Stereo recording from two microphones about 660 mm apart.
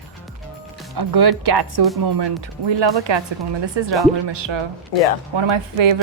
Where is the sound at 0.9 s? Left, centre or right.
Right.